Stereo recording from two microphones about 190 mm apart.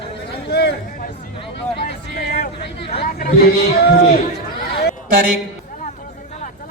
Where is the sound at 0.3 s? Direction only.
60° left (ahead or behind).